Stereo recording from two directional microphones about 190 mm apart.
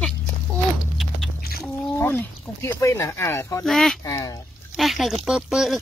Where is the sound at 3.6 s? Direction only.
Centre (ahead or behind).